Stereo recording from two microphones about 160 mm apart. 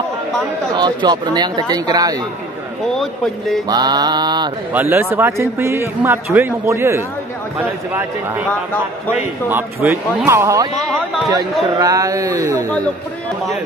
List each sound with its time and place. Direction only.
0.7 s speech: 25° right (ahead or behind)
3.0 s speech: centre (ahead or behind)
3.6 s speech: 25° right (ahead or behind)
4.7 s a man's voice: 10° right (ahead or behind)
9.5 s a man's voice: 15° right (ahead or behind)
11.8 s speech: 20° right (ahead or behind)